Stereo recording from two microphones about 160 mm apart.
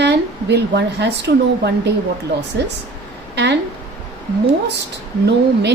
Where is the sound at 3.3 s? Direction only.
90° right.